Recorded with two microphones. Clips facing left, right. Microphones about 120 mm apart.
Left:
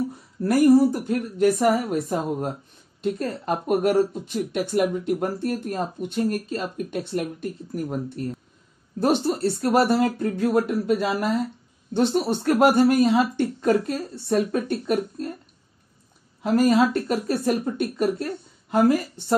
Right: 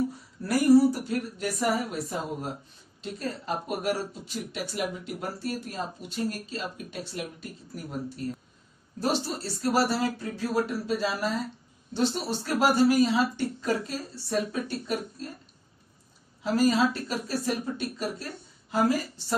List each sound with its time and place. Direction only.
0.4 s speech: 50° left (ahead or behind)
16.4 s speech: 55° left (ahead or behind)